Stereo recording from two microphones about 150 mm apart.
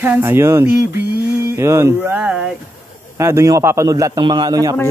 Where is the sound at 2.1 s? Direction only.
5° right (ahead or behind).